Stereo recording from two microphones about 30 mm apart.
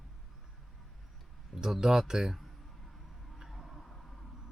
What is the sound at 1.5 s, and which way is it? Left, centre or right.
Speech, centre.